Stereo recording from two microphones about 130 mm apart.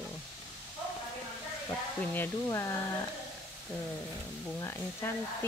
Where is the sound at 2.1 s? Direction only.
20° left (ahead or behind).